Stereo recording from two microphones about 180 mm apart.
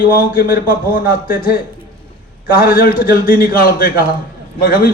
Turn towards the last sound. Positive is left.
turn(degrees=55)  # may be behind; listen again after turning